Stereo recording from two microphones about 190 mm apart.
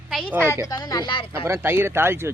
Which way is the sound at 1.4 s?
10° right (ahead or behind).